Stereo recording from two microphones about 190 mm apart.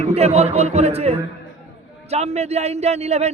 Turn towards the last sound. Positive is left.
turn(degrees=-35)  # may be behind; listen again after turning